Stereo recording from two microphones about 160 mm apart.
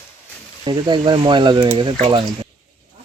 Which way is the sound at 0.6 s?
30° right (ahead or behind).